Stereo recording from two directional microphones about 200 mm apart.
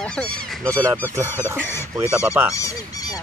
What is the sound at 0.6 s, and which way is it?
Speech, 15° right (ahead or behind).